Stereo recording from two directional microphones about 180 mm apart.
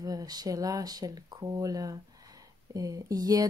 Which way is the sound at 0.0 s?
20° right (ahead or behind).